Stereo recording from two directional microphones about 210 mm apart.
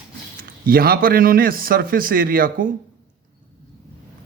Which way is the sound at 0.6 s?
45° right (ahead or behind).